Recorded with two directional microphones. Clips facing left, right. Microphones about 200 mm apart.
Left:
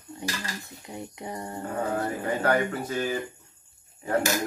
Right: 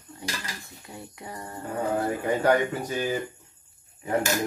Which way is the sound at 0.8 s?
20° left (ahead or behind).